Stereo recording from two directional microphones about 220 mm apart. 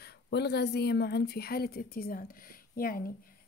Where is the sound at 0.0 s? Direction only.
50° left (ahead or behind).